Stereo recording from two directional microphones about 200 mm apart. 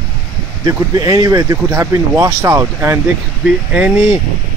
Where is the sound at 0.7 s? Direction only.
20° right (ahead or behind).